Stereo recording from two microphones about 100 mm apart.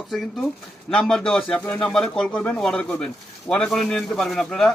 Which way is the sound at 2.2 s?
15° left (ahead or behind).